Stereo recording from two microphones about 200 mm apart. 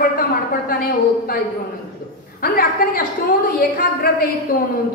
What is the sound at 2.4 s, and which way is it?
Speech, 45° left (ahead or behind).